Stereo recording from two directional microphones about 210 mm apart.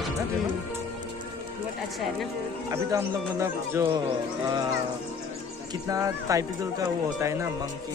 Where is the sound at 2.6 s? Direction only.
15° right (ahead or behind).